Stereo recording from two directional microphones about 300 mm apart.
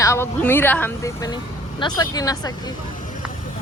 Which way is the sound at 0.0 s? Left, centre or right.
Centre.